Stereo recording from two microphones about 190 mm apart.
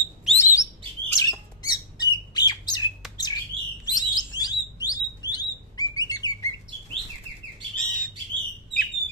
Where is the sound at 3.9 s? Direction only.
20° left (ahead or behind).